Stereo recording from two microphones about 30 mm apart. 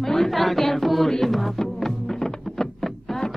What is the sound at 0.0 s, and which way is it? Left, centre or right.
Music, centre.